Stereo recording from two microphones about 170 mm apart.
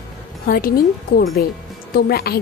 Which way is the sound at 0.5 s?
60° left (ahead or behind).